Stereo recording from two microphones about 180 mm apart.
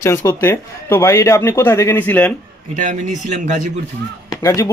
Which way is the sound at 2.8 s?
45° right (ahead or behind).